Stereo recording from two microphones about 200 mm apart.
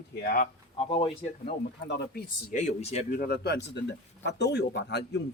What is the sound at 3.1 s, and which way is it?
Speech, 50° left (ahead or behind).